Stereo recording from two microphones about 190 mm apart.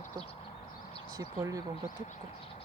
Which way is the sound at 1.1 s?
20° right (ahead or behind).